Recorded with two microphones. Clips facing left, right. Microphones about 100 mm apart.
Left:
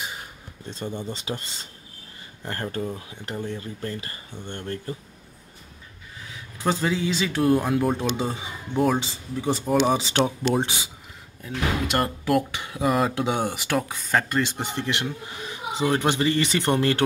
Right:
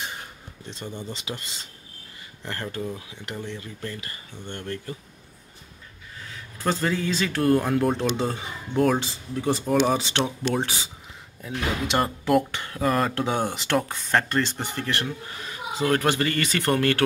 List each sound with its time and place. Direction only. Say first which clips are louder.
0.8 s speech: left 4 dB; 30° left (ahead or behind)
6.3 s speech: left 1 dB; 10° left (ahead or behind)
9.9 s speech: left 3 dB; 35° left (ahead or behind)
11.4 s speech: left 1 dB; centre (ahead or behind)
14.6 s speech: left 1 dB; 20° left (ahead or behind)